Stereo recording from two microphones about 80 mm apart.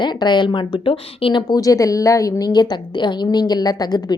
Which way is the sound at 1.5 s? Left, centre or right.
Left.